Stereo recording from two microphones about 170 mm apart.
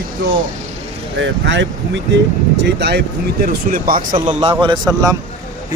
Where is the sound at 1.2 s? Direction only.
90° right; by 4.2 s 55° right (ahead or behind).